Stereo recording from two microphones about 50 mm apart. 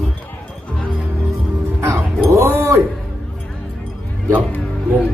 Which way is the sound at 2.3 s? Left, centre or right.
Right.